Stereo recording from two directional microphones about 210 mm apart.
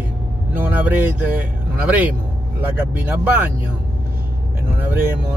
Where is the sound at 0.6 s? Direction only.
10° right (ahead or behind).